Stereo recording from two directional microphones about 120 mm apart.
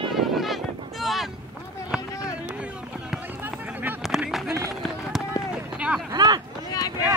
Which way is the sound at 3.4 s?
15° right (ahead or behind).